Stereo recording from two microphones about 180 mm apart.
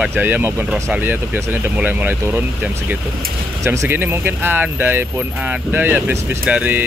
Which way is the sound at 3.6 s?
10° right (ahead or behind).